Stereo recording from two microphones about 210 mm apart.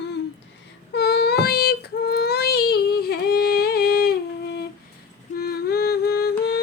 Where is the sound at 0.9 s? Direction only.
50° left (ahead or behind).